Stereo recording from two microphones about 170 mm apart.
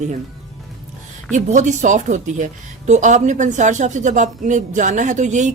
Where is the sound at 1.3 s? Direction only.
45° right (ahead or behind).